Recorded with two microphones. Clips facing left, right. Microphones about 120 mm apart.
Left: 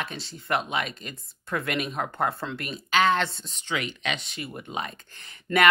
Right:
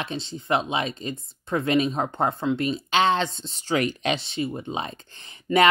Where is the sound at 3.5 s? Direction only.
35° right (ahead or behind).